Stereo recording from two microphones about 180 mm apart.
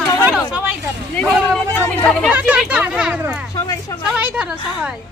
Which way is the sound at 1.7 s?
10° left (ahead or behind).